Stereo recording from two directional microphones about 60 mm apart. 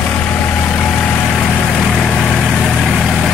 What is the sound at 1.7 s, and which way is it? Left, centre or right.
Vehicle, centre.